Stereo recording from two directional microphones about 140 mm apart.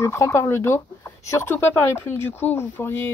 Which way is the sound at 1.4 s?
15° left (ahead or behind).